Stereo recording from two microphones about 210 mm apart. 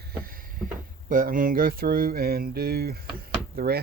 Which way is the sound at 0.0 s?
45° right (ahead or behind).